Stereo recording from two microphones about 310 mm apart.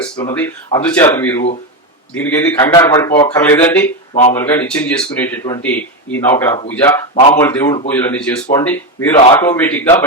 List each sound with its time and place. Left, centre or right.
0.0 s a man's voice: centre
4.1 s speech: left
4.4 s a man's voice: centre